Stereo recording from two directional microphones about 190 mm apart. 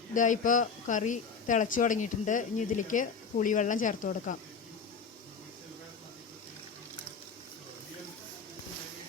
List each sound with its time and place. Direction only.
0.1 s speech: 45° left (ahead or behind)